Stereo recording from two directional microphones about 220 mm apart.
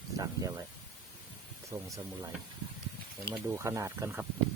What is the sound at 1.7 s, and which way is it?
Speech, 15° right (ahead or behind).